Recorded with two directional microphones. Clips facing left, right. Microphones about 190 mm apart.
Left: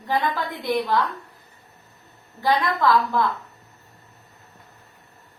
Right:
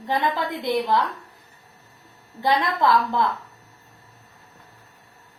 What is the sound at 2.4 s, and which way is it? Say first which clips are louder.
Speech: even; 20° right (ahead or behind).